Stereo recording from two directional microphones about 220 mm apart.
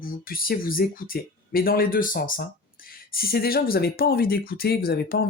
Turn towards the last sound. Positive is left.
turn(degrees=45)  # may be behind; listen again after turning